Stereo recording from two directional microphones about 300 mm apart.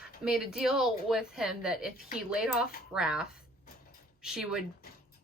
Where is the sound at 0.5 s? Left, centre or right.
Centre.